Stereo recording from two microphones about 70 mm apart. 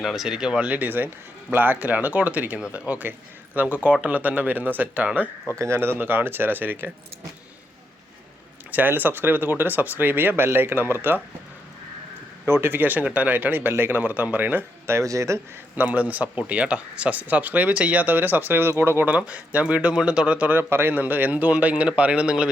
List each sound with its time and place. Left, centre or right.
0.0 s speech: centre
0.7 s a man's voice: right
5.5 s speech: right
8.7 s speech: right
12.5 s speech: right
14.8 s speech: right
15.7 s speech: right
19.0 s speech: right
20.6 s speech: right; by 22.4 s centre